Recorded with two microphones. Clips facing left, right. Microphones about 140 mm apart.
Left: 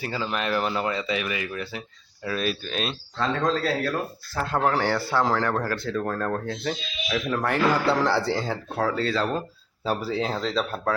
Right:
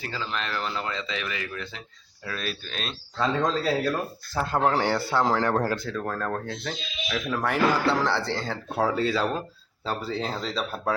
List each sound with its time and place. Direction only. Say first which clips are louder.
0.0 s speech: left 4 dB; 15° left (ahead or behind)
3.2 s speech: even; 5° right (ahead or behind)
4.6 s speech: even; 20° right (ahead or behind)
5.9 s speech: left 3 dB; centre (ahead or behind)
8.8 s speech: right 1 dB; 15° right (ahead or behind)
9.8 s speech: left 3 dB; 10° left (ahead or behind)